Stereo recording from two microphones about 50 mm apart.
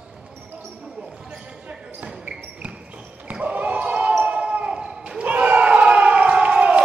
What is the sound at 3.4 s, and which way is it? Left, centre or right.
Basketball bounce, right.